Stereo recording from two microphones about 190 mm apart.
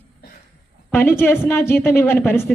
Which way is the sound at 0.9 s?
10° left (ahead or behind).